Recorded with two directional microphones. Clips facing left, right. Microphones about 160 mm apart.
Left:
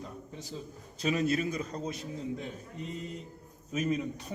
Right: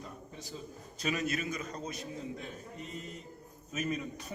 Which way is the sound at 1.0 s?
30° left (ahead or behind).